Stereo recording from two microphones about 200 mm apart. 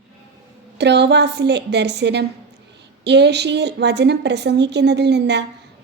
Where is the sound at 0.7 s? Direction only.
60° right (ahead or behind).